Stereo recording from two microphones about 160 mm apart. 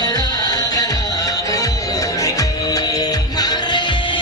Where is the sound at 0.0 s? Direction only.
25° left (ahead or behind).